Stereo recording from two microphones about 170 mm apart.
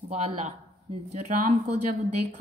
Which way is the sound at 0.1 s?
40° right (ahead or behind).